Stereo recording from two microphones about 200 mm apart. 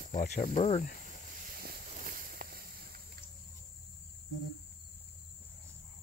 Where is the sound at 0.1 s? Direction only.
35° left (ahead or behind).